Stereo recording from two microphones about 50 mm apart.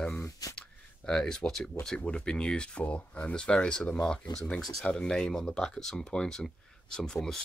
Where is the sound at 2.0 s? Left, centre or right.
Left.